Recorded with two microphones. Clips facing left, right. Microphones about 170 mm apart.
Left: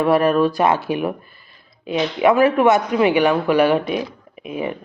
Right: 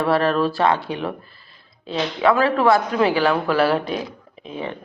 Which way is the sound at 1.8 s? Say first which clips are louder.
Left 3 dB; 15° left (ahead or behind).